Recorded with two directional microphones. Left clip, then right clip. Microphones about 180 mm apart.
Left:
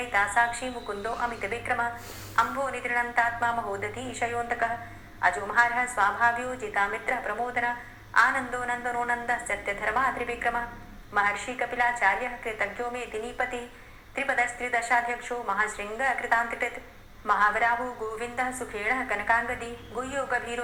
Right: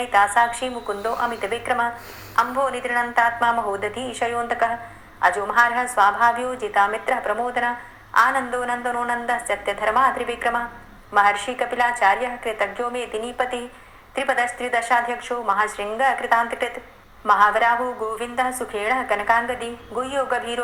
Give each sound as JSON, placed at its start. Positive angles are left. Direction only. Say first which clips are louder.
{"t": 0.1, "sound": "a woman's voice", "louder": "right 7 dB", "side_deg": -45}